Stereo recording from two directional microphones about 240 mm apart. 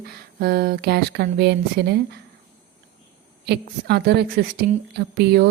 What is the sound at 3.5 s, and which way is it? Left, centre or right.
A woman's voice, right.